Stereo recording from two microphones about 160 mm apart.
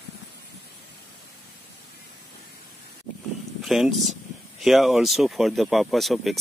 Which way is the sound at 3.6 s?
Centre (ahead or behind).